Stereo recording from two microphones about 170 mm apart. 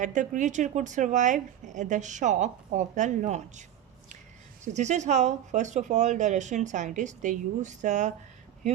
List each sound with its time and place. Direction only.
0.0 s a woman's voice: 45° right (ahead or behind)
4.6 s a woman's voice: 45° right (ahead or behind)